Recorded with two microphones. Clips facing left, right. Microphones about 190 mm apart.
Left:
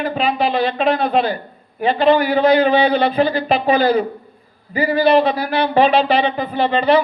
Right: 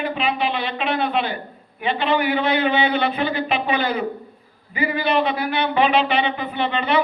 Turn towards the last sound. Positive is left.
turn(degrees=35)  # may be behind; listen again after turning